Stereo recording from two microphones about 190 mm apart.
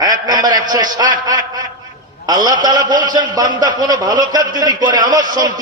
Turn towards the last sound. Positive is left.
turn(degrees=-20)  # may be behind; listen again after turning